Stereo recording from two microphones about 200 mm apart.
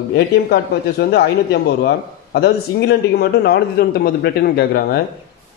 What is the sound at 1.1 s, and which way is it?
A man's voice, 55° left (ahead or behind).